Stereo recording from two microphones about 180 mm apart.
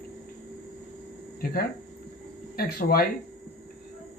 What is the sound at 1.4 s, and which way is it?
Speech, 55° left (ahead or behind).